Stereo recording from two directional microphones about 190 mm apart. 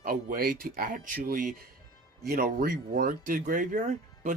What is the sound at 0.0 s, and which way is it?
Speech, 50° right (ahead or behind).